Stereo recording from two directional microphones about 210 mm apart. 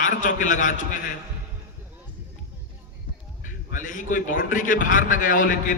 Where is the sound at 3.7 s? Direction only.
40° left (ahead or behind).